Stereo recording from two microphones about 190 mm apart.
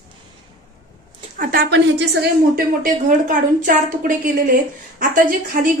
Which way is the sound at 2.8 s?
45° right (ahead or behind).